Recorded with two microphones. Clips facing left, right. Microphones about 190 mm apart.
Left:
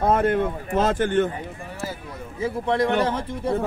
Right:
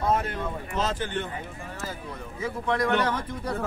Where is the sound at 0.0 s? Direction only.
55° left (ahead or behind).